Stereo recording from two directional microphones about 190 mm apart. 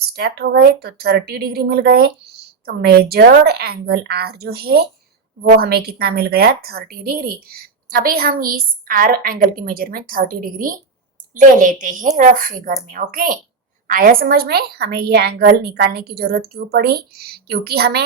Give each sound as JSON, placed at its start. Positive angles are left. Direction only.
{"t": 0.0, "sound": "a woman's voice", "side_deg": -55}